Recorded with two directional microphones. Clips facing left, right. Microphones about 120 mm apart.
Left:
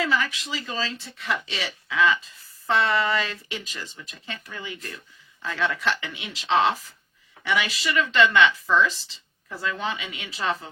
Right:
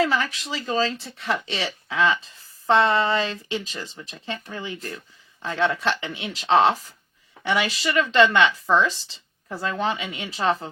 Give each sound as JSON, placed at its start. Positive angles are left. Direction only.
{"t": 0.0, "sound": "speech", "side_deg": -40}
{"t": 1.3, "sound": "speech", "side_deg": -30}
{"t": 7.4, "sound": "speech", "side_deg": -35}